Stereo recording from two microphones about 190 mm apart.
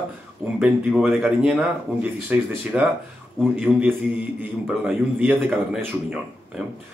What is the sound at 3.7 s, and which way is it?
Speech, 10° left (ahead or behind).